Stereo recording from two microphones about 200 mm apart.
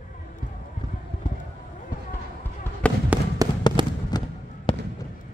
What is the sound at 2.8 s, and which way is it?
Fireworks, 5° left (ahead or behind).